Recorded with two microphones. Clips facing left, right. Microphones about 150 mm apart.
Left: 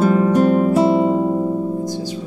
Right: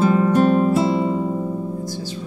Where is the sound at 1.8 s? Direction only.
15° left (ahead or behind).